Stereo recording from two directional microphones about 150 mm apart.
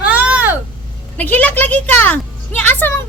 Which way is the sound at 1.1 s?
10° left (ahead or behind).